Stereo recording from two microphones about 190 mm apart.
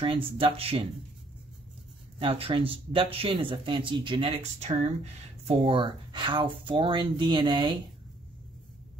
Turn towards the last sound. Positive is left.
turn(degrees=-25)  # may be behind; listen again after turning